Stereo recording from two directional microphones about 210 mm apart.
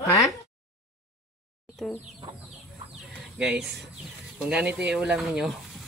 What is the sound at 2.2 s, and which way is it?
Chicken, 20° right (ahead or behind).